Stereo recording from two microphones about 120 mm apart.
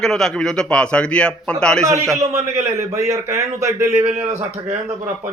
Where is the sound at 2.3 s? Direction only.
25° right (ahead or behind).